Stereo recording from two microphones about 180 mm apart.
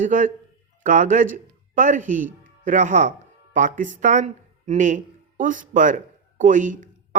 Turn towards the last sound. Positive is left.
turn(degrees=-45)  # may be behind; listen again after turning